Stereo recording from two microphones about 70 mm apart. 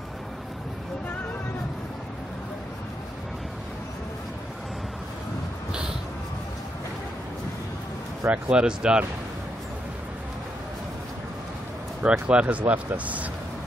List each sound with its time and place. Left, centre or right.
8.3 s speech: centre
12.0 s speech: centre